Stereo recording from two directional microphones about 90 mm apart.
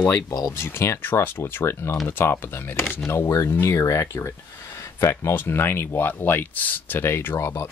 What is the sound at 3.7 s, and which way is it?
Speech, 35° left (ahead or behind).